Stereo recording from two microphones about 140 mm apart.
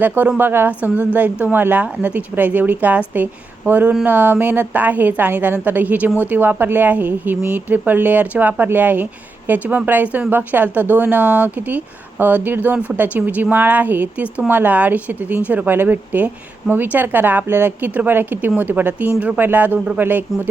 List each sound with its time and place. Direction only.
0.0 s speech: 10° right (ahead or behind)